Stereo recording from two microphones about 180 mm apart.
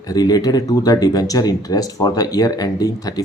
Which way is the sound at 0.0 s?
20° left (ahead or behind).